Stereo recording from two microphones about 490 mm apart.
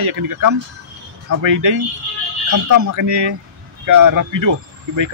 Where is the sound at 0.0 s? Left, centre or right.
Right.